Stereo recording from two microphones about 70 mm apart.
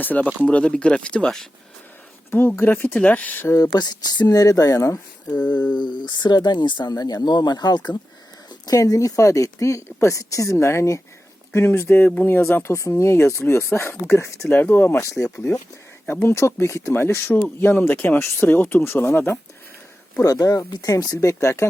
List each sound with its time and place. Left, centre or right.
0.0 s speech: left
2.6 s speech: left
3.6 s speech: left
5.4 s speech: left
6.9 s speech: left
8.4 s speech: left
11.9 s speech: left
20.2 s speech: left